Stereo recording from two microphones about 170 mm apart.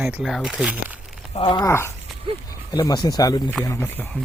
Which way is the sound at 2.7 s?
25° left (ahead or behind).